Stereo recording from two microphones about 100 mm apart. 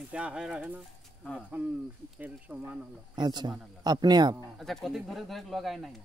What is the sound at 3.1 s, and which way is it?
Speech, 45° right (ahead or behind).